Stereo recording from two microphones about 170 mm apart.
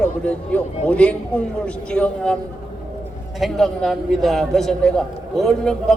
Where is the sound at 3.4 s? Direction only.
Centre (ahead or behind).